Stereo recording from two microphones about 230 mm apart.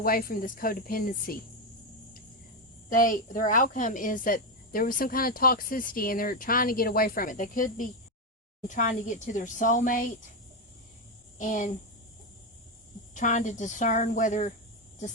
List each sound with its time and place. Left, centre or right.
0.0 s speech: left
2.9 s speech: left
11.3 s speech: left
13.1 s speech: left